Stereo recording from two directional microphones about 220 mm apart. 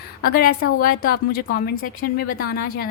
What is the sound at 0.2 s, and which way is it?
Speech, 45° left (ahead or behind).